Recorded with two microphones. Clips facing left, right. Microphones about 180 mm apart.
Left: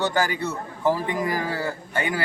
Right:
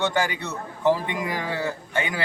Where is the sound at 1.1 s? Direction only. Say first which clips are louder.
Left 3 dB; 20° right (ahead or behind).